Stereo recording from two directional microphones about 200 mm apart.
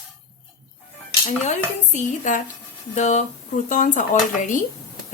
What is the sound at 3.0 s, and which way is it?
Speech, 35° left (ahead or behind).